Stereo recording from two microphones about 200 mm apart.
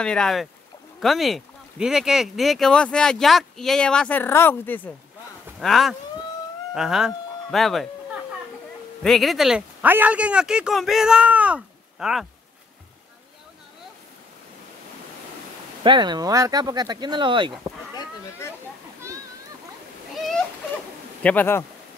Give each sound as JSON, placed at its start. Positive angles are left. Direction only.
{"t": 0.0, "sound": "speech", "side_deg": 5}
{"t": 9.0, "sound": "speech", "side_deg": 0}
{"t": 15.8, "sound": "speech", "side_deg": -20}
{"t": 21.2, "sound": "speech", "side_deg": 10}